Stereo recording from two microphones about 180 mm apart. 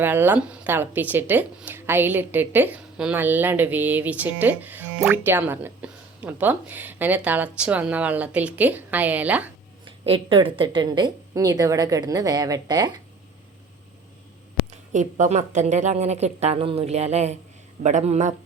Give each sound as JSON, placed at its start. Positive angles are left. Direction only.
{"t": 0.0, "sound": "speech", "side_deg": -10}
{"t": 9.8, "sound": "a woman's voice", "side_deg": -30}
{"t": 14.9, "sound": "a woman's voice", "side_deg": -45}